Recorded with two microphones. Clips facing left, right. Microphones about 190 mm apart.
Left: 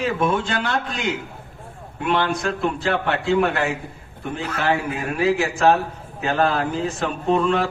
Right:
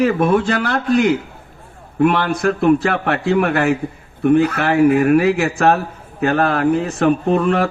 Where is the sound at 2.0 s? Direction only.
60° right (ahead or behind).